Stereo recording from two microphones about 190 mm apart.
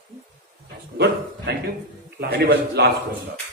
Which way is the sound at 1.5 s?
60° right (ahead or behind).